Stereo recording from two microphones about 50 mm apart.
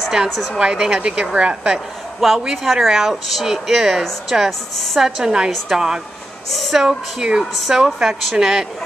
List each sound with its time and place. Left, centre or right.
0.6 s speech: centre
2.1 s speech: centre
5.0 s speech: centre
7.5 s speech: centre
7.8 s speech: centre